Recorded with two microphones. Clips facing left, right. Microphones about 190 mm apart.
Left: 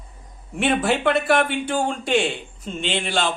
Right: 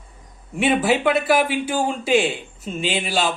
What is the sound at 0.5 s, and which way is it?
A man's voice, centre (ahead or behind).